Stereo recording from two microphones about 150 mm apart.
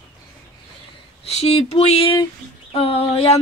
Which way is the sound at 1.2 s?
45° left (ahead or behind).